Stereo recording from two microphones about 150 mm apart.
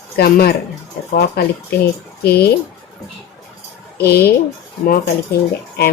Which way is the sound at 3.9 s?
90° left.